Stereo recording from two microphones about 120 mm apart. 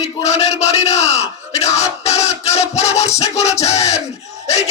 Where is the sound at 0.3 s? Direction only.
65° left (ahead or behind).